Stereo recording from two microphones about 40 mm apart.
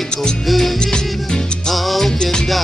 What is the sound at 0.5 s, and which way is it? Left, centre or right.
Music, centre.